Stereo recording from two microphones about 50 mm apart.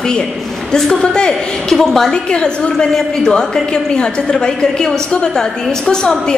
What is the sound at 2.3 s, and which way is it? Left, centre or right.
A woman's voice, centre.